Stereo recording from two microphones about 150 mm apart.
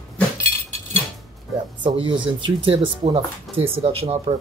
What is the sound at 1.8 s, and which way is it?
Speech, 35° right (ahead or behind).